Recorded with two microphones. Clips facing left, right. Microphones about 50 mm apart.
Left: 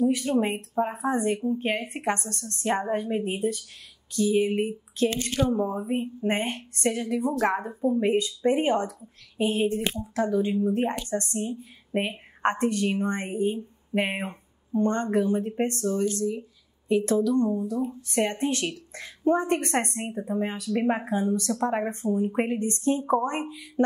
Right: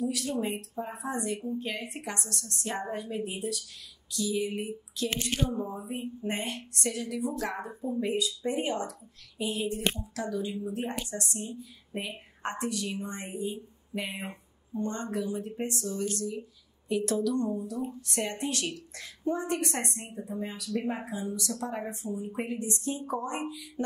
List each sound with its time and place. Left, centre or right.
0.3 s a woman's voice: left
16.9 s speech: left
18.1 s a woman's voice: left